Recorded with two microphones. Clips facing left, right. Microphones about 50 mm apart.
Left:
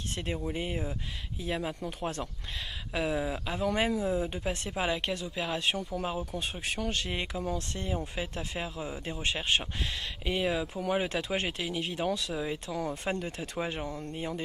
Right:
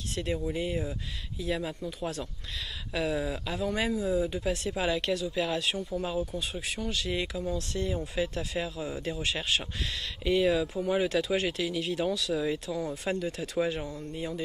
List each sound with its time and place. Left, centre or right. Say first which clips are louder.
0.1 s speech: right 3 dB; left
2.9 s speech: right 1 dB; left
12.7 s speech: right 1 dB; left